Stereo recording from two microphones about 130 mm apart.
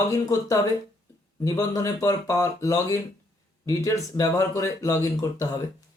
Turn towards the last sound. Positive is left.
turn(degrees=25)  # may be behind; listen again after turning